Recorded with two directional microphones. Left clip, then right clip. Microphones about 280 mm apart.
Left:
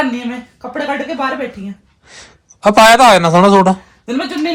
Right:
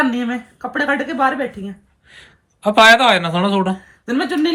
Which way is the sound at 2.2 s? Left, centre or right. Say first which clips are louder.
Left 11 dB; centre.